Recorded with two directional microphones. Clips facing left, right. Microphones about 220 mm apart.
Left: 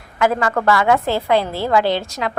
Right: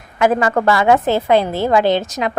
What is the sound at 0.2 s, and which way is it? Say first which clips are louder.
A woman's voice: right 3 dB; 20° right (ahead or behind).